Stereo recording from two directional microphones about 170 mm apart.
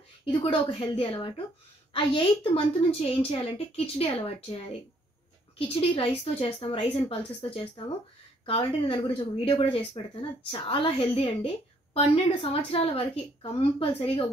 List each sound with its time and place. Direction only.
0.2 s a woman's voice: 30° left (ahead or behind)
5.8 s a woman's voice: 30° left (ahead or behind)